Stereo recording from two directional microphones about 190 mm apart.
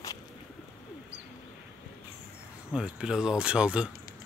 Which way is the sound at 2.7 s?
5° right (ahead or behind).